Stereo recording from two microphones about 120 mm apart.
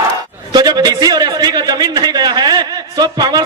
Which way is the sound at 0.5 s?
35° right (ahead or behind).